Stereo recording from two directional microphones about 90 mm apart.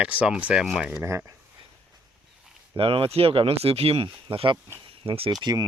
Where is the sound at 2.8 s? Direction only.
80° right.